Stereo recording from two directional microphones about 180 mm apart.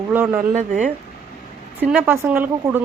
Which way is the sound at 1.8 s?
10° right (ahead or behind).